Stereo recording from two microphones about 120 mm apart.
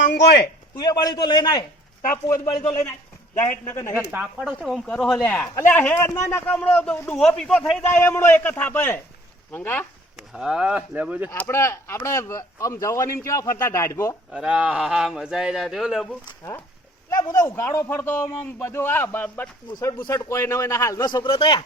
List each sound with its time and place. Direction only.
0.8 s a man's voice: 35° left (ahead or behind)
2.6 s a man's voice: 25° left (ahead or behind)
4.2 s a man's voice: 10° right (ahead or behind)
7.9 s a man's voice: 20° left (ahead or behind)
10.2 s speech: 5° right (ahead or behind)
11.3 s speech: 20° left (ahead or behind)
14.3 s speech: 10° right (ahead or behind)
17.1 s speech: 30° left (ahead or behind)
19.9 s speech: 35° left (ahead or behind)